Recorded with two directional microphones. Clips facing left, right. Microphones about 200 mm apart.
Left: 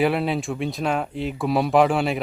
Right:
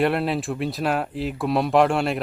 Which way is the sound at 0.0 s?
Centre (ahead or behind).